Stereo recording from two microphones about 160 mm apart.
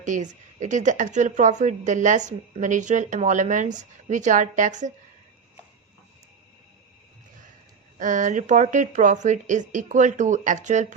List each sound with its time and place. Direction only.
0.0 s a woman's voice: 50° right (ahead or behind)
7.9 s a woman's voice: 55° right (ahead or behind)